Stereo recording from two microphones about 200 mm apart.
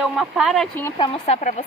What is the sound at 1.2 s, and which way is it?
Speech, 35° left (ahead or behind).